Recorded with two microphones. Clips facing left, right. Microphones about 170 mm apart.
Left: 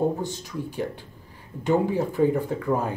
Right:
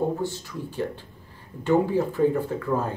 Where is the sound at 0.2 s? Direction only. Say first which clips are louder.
Even; 15° left (ahead or behind).